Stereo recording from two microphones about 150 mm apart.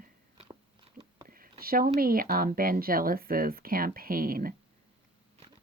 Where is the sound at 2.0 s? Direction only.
75° right (ahead or behind).